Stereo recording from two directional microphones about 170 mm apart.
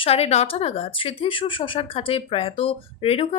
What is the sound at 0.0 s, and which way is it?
Speech, 35° left (ahead or behind).